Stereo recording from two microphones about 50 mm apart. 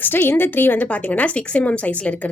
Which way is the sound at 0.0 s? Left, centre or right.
Left.